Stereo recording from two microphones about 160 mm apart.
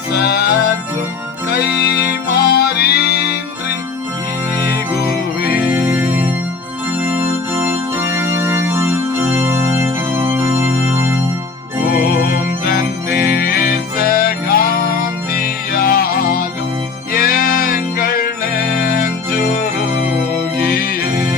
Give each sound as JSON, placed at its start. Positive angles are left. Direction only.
{"t": 0.1, "sound": "music", "side_deg": 85}
{"t": 5.5, "sound": "music", "side_deg": -10}
{"t": 7.0, "sound": "organ", "side_deg": -10}
{"t": 11.9, "sound": "music", "side_deg": 75}